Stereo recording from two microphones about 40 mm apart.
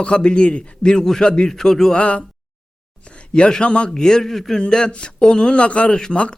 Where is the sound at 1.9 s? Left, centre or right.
Left.